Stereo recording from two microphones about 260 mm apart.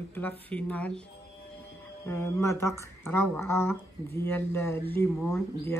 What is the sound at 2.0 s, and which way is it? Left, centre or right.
Speech, centre.